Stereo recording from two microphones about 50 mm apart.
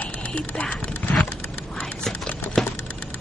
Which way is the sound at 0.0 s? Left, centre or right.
Left.